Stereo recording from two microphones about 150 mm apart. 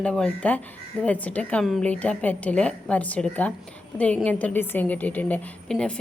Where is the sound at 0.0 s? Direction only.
5° left (ahead or behind).